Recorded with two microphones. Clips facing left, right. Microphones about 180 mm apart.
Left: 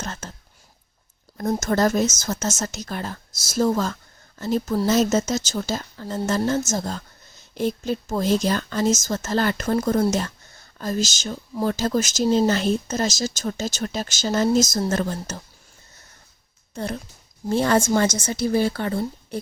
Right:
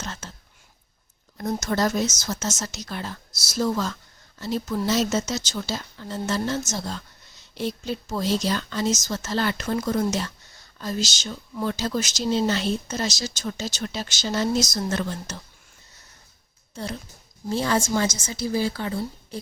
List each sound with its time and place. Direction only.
0.0 s a sound: 45° left (ahead or behind)
1.4 s a woman's voice: 45° left (ahead or behind)
16.7 s a woman's voice: 55° left (ahead or behind)